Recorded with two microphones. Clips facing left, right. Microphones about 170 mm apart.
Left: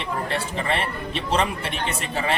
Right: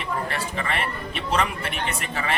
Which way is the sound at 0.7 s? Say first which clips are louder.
Left 3 dB; 30° left (ahead or behind).